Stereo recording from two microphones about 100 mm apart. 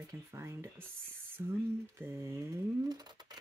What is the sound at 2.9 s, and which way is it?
Speech, 45° right (ahead or behind).